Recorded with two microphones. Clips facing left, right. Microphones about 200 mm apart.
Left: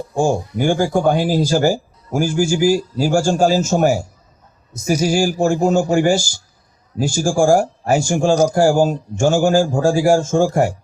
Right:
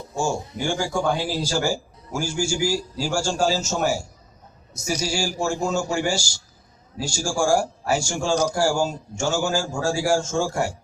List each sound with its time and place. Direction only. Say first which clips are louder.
0.2 s speech: left 8 dB; 55° left (ahead or behind)